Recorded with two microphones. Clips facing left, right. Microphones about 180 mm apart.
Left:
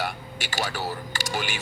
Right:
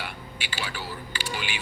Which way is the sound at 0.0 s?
45° left (ahead or behind).